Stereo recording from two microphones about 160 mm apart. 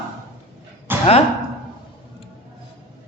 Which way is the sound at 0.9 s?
15° right (ahead or behind).